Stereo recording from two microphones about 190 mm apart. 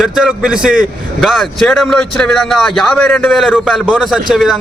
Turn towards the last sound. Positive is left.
turn(degrees=0)  # may be behind; listen again after turning